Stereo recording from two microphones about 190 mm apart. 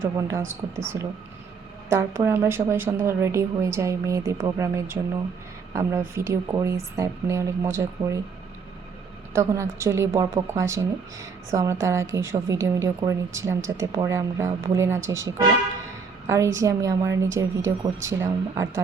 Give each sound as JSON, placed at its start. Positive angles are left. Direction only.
{"t": 0.0, "sound": "speech", "side_deg": -15}
{"t": 1.9, "sound": "speech", "side_deg": -15}
{"t": 9.3, "sound": "speech", "side_deg": -15}